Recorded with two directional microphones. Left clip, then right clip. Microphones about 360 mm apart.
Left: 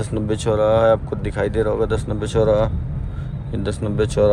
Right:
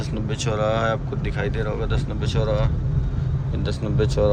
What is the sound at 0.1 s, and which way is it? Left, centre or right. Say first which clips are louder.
Speech: left 7 dB; centre.